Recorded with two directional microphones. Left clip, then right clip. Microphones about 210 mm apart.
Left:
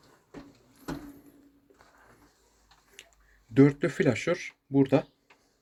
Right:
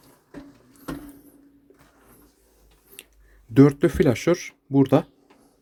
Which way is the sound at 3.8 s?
20° right (ahead or behind).